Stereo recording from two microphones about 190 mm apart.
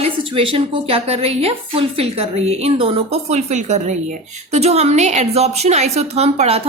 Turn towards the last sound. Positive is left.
turn(degrees=-35)  # may be behind; listen again after turning